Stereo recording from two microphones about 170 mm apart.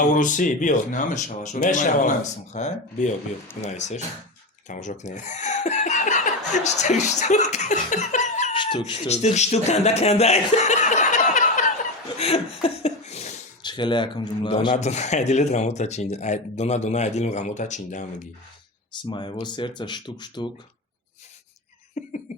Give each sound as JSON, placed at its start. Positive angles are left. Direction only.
{"t": 0.0, "sound": "speech", "side_deg": 50}
{"t": 8.5, "sound": "cat", "side_deg": 30}
{"t": 8.8, "sound": "speech", "side_deg": 40}
{"t": 12.2, "sound": "a sound", "side_deg": 35}
{"t": 13.6, "sound": "speech", "side_deg": 25}
{"t": 14.7, "sound": "speech", "side_deg": 40}
{"t": 19.0, "sound": "speech", "side_deg": 25}
{"t": 22.0, "sound": "a sound", "side_deg": 45}